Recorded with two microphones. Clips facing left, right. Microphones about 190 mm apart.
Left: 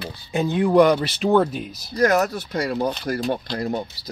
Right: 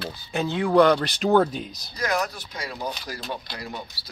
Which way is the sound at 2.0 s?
40° left (ahead or behind).